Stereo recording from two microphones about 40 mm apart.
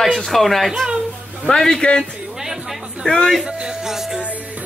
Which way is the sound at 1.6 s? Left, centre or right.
Centre.